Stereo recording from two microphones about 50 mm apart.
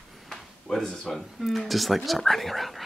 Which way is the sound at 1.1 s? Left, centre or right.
Centre.